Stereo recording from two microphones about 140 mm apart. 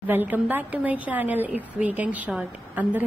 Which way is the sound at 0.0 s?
15° right (ahead or behind).